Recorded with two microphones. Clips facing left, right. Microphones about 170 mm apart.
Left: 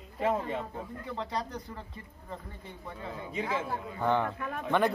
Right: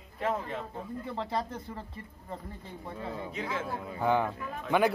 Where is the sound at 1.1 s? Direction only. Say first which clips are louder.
Right 1 dB; 30° right (ahead or behind).